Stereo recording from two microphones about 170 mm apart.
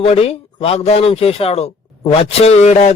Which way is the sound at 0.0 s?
35° left (ahead or behind).